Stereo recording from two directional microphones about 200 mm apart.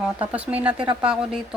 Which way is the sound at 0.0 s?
5° right (ahead or behind).